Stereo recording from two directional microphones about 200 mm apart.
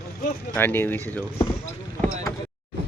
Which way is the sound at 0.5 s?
10° left (ahead or behind).